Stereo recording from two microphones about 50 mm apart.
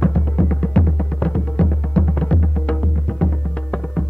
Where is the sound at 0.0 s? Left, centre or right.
Left.